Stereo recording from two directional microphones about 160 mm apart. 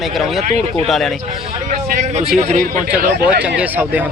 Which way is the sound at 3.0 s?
90° right.